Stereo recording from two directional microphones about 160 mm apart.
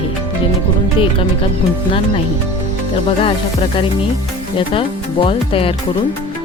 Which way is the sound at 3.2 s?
35° left (ahead or behind).